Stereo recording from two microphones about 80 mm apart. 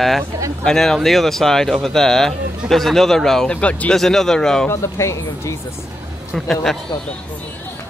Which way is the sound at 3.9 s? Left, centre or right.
Centre.